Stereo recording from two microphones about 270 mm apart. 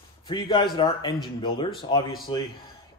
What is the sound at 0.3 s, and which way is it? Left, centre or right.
Speech, centre.